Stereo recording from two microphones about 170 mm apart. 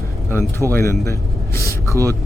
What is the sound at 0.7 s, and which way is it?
A man's voice, 20° left (ahead or behind).